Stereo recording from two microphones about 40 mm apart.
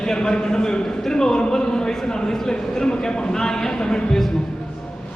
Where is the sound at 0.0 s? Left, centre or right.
Centre.